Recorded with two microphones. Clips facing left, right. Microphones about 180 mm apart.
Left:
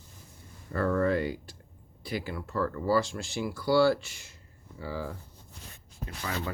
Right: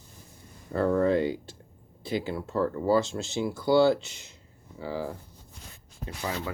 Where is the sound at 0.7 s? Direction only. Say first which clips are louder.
Right 3 dB; 20° right (ahead or behind).